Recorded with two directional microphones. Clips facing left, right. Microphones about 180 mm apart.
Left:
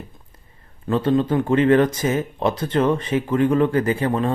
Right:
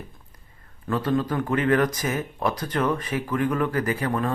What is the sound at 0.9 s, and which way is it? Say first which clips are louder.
Speech: left 5 dB; 25° left (ahead or behind).